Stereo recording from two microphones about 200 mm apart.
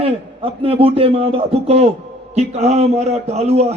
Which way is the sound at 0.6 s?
30° right (ahead or behind).